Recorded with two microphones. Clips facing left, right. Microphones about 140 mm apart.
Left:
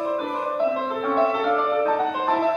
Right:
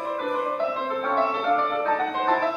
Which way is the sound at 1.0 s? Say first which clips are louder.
Left 3 dB; 5° left (ahead or behind).